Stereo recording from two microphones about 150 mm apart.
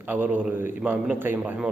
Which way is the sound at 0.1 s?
10° right (ahead or behind).